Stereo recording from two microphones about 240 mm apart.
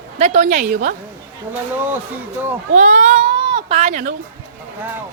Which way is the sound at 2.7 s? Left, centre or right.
Right.